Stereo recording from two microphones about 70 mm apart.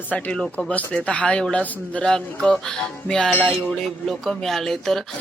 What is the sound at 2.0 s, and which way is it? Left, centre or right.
Speech, centre.